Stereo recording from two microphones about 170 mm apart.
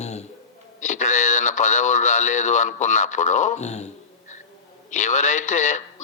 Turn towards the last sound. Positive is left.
turn(degrees=45)  # may be behind; listen again after turning